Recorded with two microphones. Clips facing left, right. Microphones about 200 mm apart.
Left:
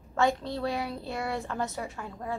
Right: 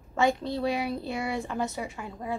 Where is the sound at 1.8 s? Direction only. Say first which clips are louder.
Right 1 dB; 10° right (ahead or behind).